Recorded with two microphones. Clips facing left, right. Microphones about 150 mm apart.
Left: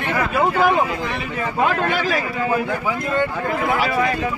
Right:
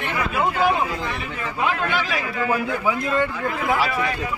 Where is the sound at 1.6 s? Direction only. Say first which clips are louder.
Left 3 dB; 45° left (ahead or behind).